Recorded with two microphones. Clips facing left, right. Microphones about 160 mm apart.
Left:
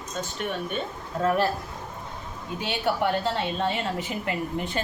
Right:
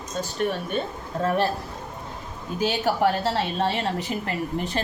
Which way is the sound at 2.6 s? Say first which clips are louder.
Right 3 dB; 40° right (ahead or behind).